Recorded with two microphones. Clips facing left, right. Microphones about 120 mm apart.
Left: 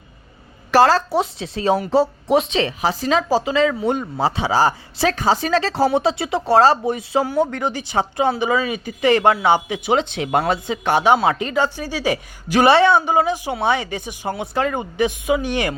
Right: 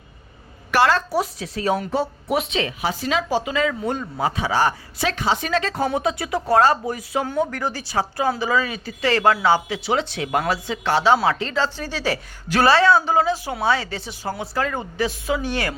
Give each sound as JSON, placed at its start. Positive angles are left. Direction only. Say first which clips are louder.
{"t": 0.7, "sound": "speech", "louder": "left 4 dB", "side_deg": 35}